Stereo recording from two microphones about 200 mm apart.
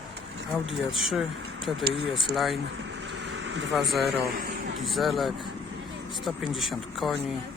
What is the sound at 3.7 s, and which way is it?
Speech, centre (ahead or behind).